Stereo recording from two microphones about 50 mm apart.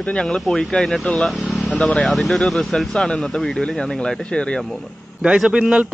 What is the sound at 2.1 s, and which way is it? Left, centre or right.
A man's voice, centre.